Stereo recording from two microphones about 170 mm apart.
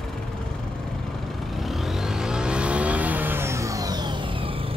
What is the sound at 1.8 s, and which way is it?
Vehicle, centre (ahead or behind).